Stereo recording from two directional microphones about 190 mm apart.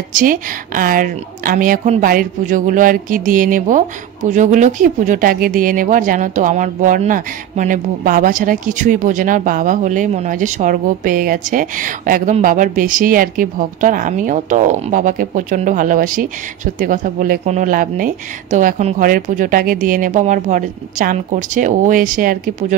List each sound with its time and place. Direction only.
0.1 s a woman's voice: 45° right (ahead or behind)